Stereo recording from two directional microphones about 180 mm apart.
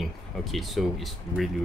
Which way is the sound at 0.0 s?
Centre (ahead or behind).